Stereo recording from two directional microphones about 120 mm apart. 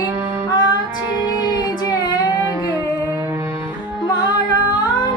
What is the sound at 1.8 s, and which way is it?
Child singing, 35° left (ahead or behind).